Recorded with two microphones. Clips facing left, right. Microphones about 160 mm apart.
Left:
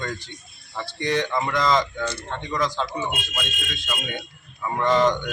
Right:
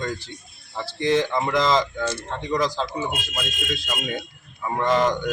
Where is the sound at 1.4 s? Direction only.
20° right (ahead or behind).